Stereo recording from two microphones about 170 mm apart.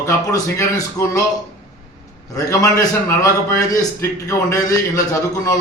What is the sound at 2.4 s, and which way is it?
A man's voice, 20° left (ahead or behind).